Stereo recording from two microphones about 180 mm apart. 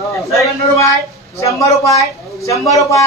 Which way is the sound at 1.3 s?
15° left (ahead or behind).